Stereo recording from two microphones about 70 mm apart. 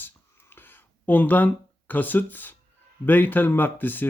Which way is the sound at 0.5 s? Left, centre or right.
Left.